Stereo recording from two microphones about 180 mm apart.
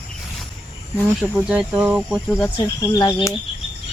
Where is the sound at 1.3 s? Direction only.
5° right (ahead or behind).